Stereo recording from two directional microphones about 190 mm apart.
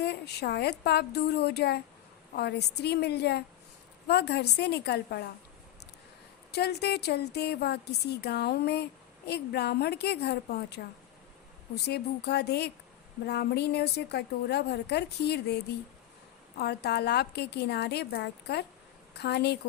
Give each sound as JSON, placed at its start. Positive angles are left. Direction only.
{"t": 0.0, "sound": "a woman's voice", "side_deg": 60}
{"t": 6.5, "sound": "a woman's voice", "side_deg": 60}
{"t": 16.6, "sound": "a woman's voice", "side_deg": 60}